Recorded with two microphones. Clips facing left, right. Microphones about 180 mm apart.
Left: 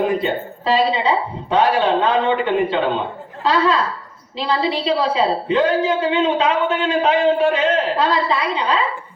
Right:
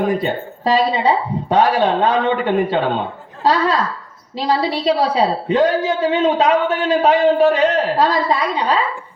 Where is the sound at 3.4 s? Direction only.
40° right (ahead or behind).